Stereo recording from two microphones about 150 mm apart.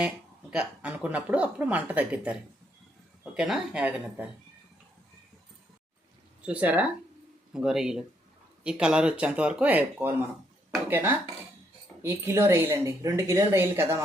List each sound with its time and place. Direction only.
0.5 s a woman's voice: 10° right (ahead or behind)
6.4 s a woman's voice: 10° right (ahead or behind)